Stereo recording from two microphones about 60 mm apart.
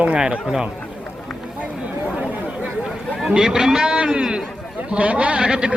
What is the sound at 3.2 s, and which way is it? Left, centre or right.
A man's voice, centre.